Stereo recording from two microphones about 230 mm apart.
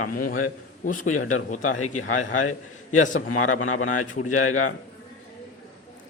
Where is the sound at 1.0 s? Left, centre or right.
Left.